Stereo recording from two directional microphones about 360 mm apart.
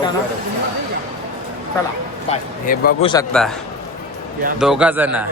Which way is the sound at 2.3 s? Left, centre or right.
Left.